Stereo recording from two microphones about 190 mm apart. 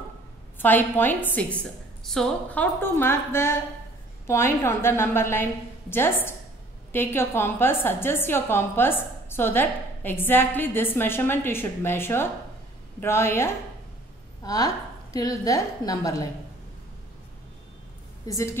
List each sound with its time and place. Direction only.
0.6 s a woman's voice: 10° left (ahead or behind)
18.2 s a woman's voice: 15° left (ahead or behind)